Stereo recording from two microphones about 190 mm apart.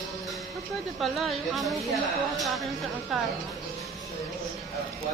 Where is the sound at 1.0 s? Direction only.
Centre (ahead or behind).